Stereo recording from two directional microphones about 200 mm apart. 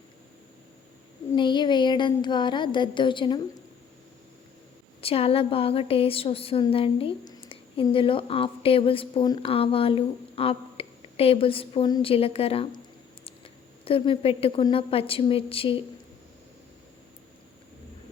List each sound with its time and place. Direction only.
1.3 s a woman's voice: 25° left (ahead or behind)
4.9 s a woman's voice: 30° left (ahead or behind)